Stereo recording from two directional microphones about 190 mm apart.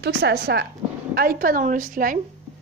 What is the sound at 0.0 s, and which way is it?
A woman's voice, 55° right (ahead or behind).